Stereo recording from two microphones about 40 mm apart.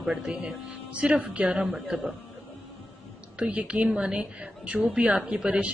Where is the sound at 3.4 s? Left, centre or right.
Right.